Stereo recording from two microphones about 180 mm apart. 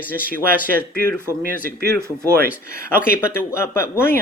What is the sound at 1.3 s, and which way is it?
Speech, 15° right (ahead or behind).